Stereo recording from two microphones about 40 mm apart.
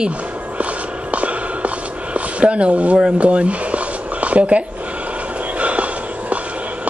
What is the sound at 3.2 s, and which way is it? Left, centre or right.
Speech, right.